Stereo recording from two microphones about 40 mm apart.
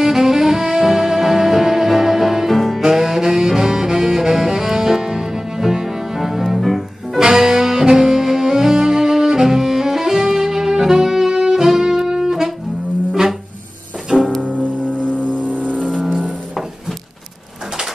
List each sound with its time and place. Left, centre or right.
0.0 s music: centre
2.8 s music: centre
15.5 s music: right